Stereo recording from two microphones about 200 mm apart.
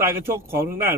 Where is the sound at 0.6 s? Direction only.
45° right (ahead or behind).